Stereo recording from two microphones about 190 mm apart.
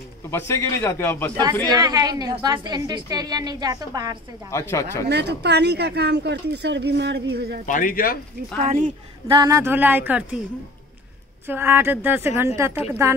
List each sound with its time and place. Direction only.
0.3 s a man's voice: 15° left (ahead or behind)
1.4 s a woman's voice: 20° right (ahead or behind)
4.5 s a man's voice: 15° left (ahead or behind)
5.0 s speech: 60° right (ahead or behind)
7.6 s speech: 45° left (ahead or behind)
8.6 s a man's voice: 45° right (ahead or behind)
9.3 s a woman's voice: 20° right (ahead or behind)
11.4 s a woman's voice: 10° right (ahead or behind)